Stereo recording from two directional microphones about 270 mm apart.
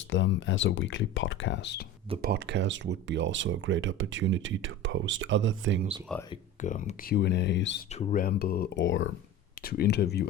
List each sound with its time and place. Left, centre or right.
0.1 s speech: left
2.2 s speech: right
6.6 s speech: left